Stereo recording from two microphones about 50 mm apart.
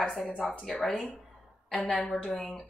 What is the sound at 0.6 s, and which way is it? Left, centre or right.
Speech, centre.